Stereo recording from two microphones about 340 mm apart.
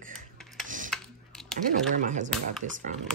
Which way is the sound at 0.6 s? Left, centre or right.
Right.